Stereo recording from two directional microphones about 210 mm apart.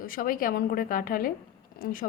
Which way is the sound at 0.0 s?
40° left (ahead or behind).